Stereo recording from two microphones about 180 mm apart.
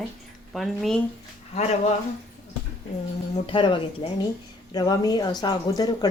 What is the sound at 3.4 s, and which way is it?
Speech, 25° left (ahead or behind).